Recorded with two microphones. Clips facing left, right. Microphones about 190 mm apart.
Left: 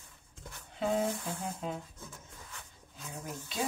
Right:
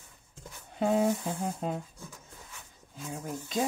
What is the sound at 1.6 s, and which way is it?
Speech, 45° right (ahead or behind).